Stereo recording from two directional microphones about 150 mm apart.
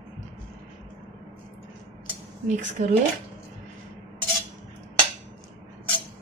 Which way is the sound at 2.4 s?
55° right (ahead or behind).